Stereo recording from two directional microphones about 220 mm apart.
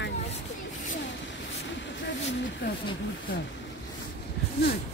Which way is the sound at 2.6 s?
55° left (ahead or behind).